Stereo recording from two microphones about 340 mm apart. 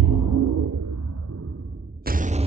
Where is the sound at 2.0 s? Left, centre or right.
Right.